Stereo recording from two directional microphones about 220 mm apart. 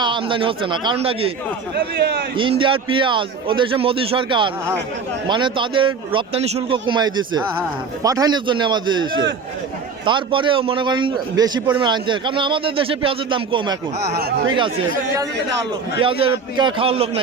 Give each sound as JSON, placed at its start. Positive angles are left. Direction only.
{"t": 0.0, "sound": "a man's voice", "side_deg": -20}
{"t": 1.7, "sound": "a man's voice", "side_deg": -50}
{"t": 2.3, "sound": "a man's voice", "side_deg": -25}
{"t": 14.1, "sound": "a man's voice", "side_deg": -45}
{"t": 14.4, "sound": "a man's voice", "side_deg": -20}
{"t": 16.2, "sound": "a man's voice", "side_deg": -20}